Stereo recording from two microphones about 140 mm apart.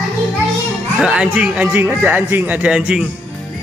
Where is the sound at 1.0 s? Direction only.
5° right (ahead or behind).